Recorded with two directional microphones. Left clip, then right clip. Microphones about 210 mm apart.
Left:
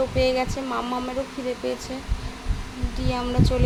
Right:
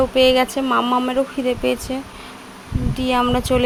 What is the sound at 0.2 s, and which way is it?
Speech, 40° right (ahead or behind).